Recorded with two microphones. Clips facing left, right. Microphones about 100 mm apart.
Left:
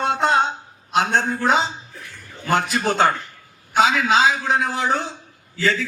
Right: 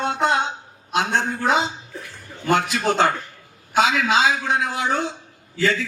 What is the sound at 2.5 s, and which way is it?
A man's voice, 40° left (ahead or behind).